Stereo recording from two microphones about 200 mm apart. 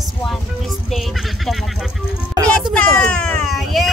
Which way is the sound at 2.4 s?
20° right (ahead or behind).